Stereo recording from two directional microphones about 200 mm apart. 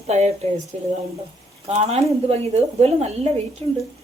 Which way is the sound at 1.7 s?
30° right (ahead or behind).